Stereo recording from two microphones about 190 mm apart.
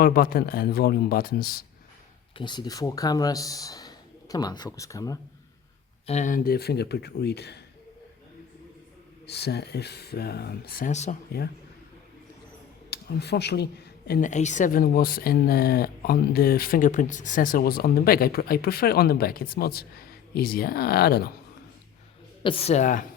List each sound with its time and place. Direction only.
0.0 s speech: 50° left (ahead or behind)
2.4 s speech: 25° left (ahead or behind)
6.1 s speech: 40° left (ahead or behind); by 7.6 s 60° left (ahead or behind)
9.2 s speech: 60° left (ahead or behind); by 11.2 s 40° left (ahead or behind)
12.9 s speech: 60° left (ahead or behind)
14.2 s speech: 40° left (ahead or behind); by 21.3 s 55° left (ahead or behind)
22.4 s a woman's voice: 30° left (ahead or behind)